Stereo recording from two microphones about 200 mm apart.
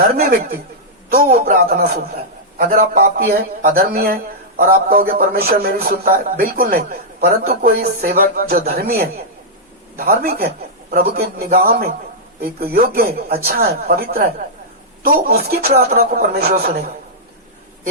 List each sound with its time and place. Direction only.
0.2 s speech: 50° right (ahead or behind)
10.1 s speech: 50° right (ahead or behind)